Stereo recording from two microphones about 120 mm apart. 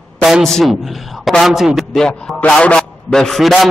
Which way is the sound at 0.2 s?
Centre (ahead or behind).